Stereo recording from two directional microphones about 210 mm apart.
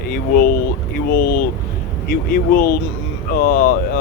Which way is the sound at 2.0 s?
45° left (ahead or behind).